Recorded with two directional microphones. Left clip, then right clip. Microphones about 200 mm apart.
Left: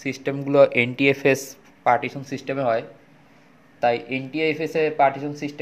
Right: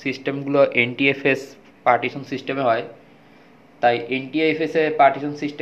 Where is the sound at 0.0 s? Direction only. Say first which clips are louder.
Right 2 dB; 50° left (ahead or behind).